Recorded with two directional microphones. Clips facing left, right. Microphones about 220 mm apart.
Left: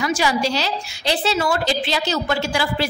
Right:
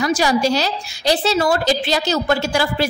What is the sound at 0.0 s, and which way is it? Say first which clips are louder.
A woman's voice: right 3 dB; 40° right (ahead or behind).